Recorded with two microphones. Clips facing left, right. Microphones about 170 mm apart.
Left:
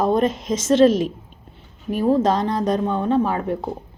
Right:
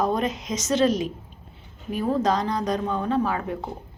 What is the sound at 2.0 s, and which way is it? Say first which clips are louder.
A woman's voice: left 5 dB; 25° left (ahead or behind).